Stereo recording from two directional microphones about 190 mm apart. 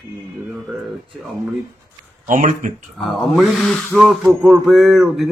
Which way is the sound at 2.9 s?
Centre (ahead or behind).